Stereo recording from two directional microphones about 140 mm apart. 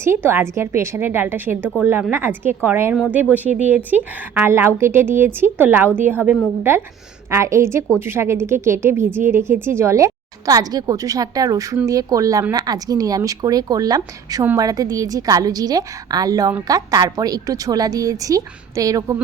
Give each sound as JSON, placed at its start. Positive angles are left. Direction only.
{"t": 0.0, "sound": "a woman's voice", "side_deg": -15}